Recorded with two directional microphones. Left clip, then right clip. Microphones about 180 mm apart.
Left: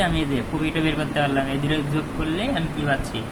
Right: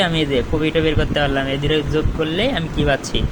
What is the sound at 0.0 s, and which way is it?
Speech, 30° right (ahead or behind).